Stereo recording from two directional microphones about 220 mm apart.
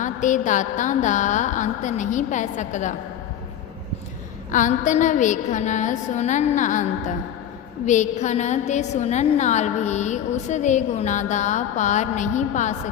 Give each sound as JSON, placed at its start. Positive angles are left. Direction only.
{"t": 0.0, "sound": "a woman's voice", "side_deg": 35}
{"t": 4.5, "sound": "a woman's voice", "side_deg": 35}